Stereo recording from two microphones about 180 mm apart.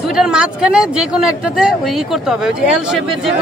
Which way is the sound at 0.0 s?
5° right (ahead or behind).